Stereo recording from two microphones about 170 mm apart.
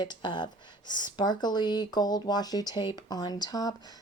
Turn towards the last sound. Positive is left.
turn(degrees=20)  # may be behind; listen again after turning